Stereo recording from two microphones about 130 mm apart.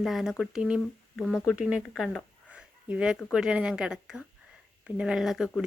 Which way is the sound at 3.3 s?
5° right (ahead or behind).